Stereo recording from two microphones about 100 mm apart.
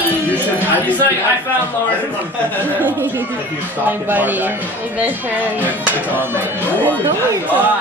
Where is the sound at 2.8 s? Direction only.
20° right (ahead or behind).